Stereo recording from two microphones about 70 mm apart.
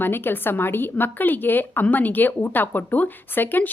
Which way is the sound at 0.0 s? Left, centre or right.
Left.